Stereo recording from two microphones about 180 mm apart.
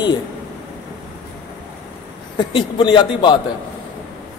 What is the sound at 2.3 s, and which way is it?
A man's voice, 25° left (ahead or behind).